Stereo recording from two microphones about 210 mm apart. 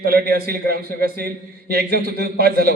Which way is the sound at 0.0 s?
50° right (ahead or behind).